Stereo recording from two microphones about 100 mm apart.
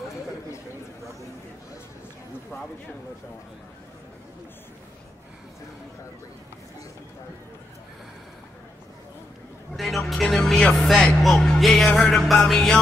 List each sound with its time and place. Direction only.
9.8 s music: centre (ahead or behind)